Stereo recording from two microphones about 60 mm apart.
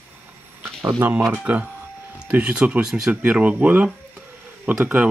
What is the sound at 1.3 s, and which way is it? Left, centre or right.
Speech, right.